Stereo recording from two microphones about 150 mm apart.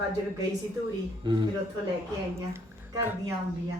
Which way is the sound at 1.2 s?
30° right (ahead or behind).